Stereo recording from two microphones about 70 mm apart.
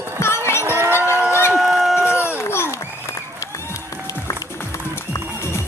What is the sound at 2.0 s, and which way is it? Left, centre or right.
Run, left.